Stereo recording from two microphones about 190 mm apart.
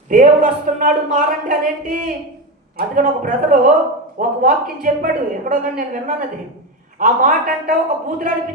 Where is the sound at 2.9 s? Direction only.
45° right (ahead or behind).